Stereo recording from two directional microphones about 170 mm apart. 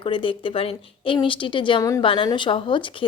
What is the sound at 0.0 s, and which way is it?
A woman's voice, 30° left (ahead or behind).